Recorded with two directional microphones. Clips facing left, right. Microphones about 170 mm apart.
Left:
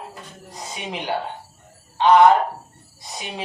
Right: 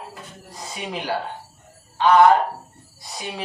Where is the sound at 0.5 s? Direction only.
20° left (ahead or behind).